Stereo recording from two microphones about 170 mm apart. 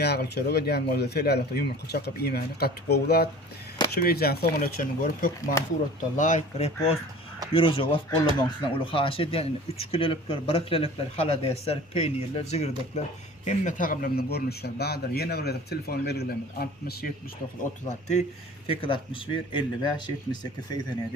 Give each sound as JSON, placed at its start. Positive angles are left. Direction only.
{"t": 0.0, "sound": "speech", "side_deg": 75}
{"t": 7.5, "sound": "speech", "side_deg": 30}
{"t": 17.6, "sound": "speech", "side_deg": 45}
{"t": 18.7, "sound": "speech", "side_deg": 30}